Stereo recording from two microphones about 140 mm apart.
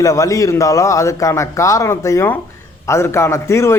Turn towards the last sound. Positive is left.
turn(degrees=20)  # may be behind; listen again after turning